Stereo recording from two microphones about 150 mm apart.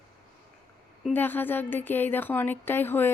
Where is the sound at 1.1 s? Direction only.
15° left (ahead or behind).